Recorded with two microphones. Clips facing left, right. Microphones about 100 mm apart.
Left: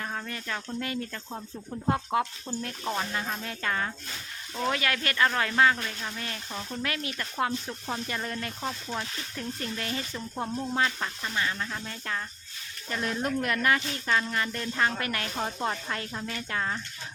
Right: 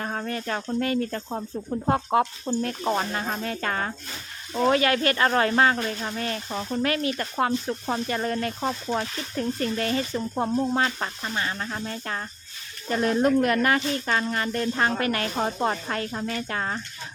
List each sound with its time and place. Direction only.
0.0 s speech: 40° right (ahead or behind)
4.7 s speech: 30° right (ahead or behind); by 10.0 s 50° right (ahead or behind)
10.8 s speech: 35° right (ahead or behind)